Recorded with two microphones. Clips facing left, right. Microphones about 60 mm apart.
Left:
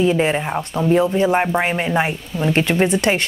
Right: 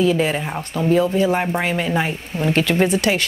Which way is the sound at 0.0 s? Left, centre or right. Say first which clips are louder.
Left 1 dB; left.